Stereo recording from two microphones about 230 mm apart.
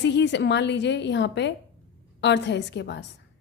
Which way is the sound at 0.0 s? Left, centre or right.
Left.